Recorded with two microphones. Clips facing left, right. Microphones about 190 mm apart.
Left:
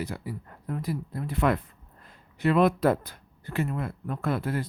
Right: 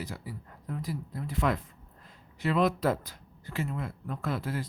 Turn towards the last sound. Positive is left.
turn(degrees=60)  # may be behind; listen again after turning